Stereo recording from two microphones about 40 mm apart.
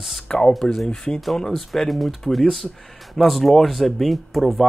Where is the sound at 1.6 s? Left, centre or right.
Centre.